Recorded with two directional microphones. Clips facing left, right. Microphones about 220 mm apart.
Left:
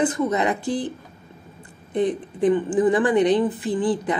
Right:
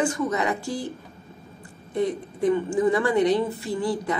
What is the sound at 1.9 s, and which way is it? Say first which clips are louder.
A woman's voice: left 3 dB; 20° left (ahead or behind).